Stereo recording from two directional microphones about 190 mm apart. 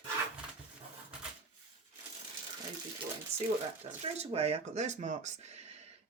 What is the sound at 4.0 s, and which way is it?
Speech, 30° right (ahead or behind).